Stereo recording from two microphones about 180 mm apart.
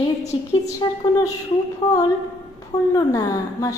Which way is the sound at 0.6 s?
20° left (ahead or behind).